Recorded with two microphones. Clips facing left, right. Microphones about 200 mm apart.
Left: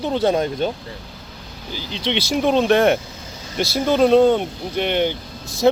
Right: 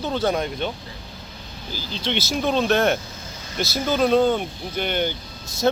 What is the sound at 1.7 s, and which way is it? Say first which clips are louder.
Speech: left 3 dB; 75° left (ahead or behind).